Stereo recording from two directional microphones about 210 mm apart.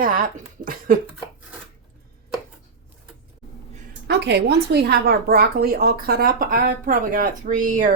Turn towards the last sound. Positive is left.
turn(degrees=-35)  # may be behind; listen again after turning